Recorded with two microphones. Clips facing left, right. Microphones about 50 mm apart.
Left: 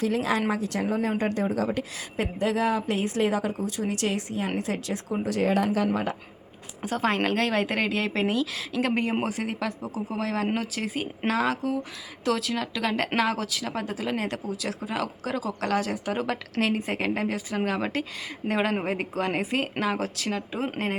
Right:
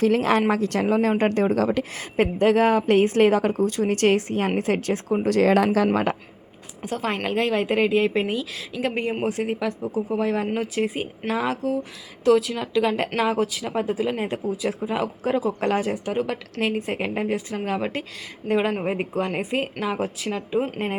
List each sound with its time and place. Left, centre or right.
0.0 s a woman's voice: right
5.4 s speech: right
6.9 s a woman's voice: centre; by 15.8 s right
16.0 s a woman's voice: centre
18.4 s speech: left
18.9 s a woman's voice: centre
19.3 s a woman's voice: centre
19.8 s a woman's voice: centre